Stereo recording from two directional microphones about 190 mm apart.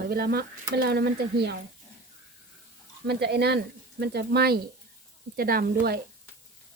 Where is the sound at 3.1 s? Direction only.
60° right (ahead or behind).